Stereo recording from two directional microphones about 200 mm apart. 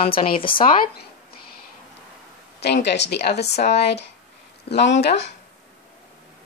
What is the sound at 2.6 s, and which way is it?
Speech, 60° left (ahead or behind).